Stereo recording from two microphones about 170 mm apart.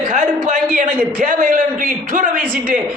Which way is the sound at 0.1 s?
45° right (ahead or behind).